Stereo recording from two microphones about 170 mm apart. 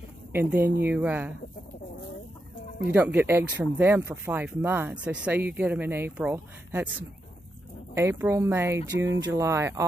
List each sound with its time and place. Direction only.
0.3 s speech: 10° right (ahead or behind)
2.9 s speech: 10° right (ahead or behind)